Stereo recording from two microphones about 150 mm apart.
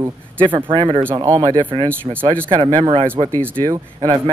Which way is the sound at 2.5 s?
30° right (ahead or behind).